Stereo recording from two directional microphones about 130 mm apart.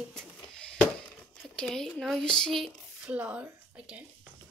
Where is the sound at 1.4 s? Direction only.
Centre (ahead or behind).